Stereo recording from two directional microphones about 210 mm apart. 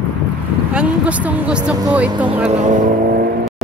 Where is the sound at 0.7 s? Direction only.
5° right (ahead or behind).